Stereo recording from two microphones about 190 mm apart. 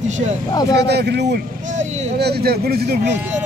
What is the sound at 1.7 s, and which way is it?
Speech, 35° right (ahead or behind).